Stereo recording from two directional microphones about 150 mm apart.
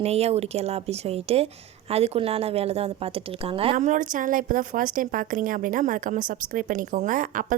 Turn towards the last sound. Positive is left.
turn(degrees=-65)  # may be behind; listen again after turning